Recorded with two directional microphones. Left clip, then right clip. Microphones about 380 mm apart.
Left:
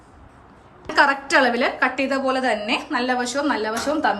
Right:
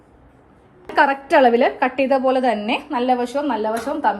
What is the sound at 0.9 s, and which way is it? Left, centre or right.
A woman's voice, centre.